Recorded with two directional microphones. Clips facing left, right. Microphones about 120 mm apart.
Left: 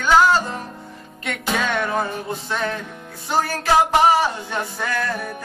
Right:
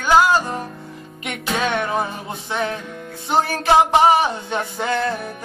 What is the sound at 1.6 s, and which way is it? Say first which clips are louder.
Music: right 2 dB; 20° right (ahead or behind).